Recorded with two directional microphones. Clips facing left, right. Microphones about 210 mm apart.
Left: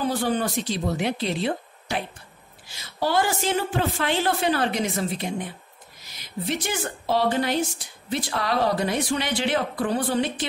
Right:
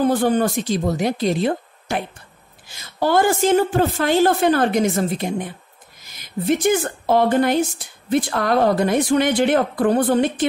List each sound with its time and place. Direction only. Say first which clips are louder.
0.0 s a woman's voice: right 7 dB; 50° right (ahead or behind)